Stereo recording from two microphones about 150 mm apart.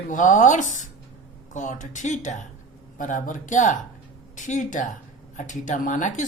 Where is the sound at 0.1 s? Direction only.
60° left (ahead or behind).